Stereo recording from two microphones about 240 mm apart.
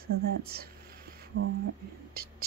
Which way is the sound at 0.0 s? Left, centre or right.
Right.